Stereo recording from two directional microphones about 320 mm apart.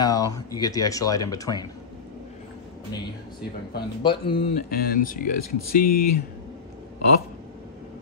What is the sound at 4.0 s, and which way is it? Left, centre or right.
Speech, centre.